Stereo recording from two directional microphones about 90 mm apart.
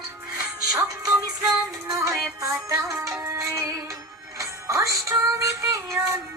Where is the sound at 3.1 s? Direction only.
30° right (ahead or behind).